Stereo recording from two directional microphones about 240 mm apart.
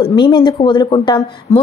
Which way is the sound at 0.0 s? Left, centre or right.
Centre.